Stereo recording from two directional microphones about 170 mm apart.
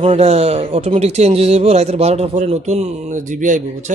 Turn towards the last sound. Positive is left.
turn(degrees=-50)  # may be behind; listen again after turning